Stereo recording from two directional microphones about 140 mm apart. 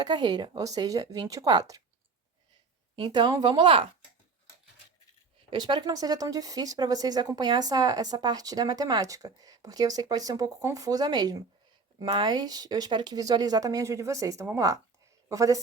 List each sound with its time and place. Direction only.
0.0 s speech: 30° right (ahead or behind)
2.9 s a woman's voice: 35° right (ahead or behind)
5.5 s speech: 35° right (ahead or behind)